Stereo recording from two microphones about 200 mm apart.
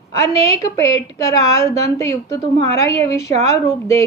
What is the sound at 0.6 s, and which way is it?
A woman's voice, 15° left (ahead or behind).